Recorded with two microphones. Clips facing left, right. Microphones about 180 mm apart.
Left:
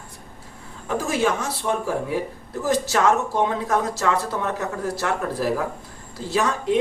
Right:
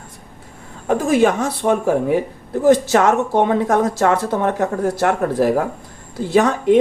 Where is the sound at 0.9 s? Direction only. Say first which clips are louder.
Right 7 dB; 55° right (ahead or behind).